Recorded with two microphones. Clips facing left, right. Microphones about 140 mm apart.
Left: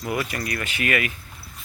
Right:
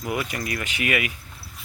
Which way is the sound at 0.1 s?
15° right (ahead or behind).